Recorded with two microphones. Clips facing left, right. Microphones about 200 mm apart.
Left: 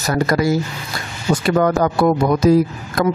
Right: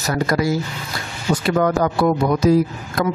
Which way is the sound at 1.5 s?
50° left (ahead or behind).